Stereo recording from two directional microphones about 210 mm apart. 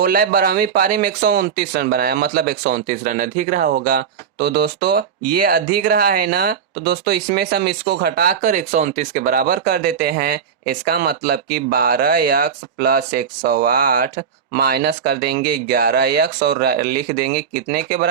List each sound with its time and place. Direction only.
0.0 s speech: 45° right (ahead or behind)